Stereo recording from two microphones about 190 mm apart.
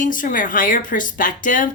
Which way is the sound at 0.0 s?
45° left (ahead or behind).